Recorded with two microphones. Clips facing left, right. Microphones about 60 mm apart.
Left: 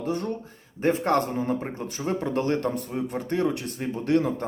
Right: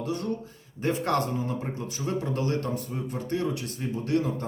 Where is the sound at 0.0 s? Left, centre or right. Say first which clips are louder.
Left 2 dB; left.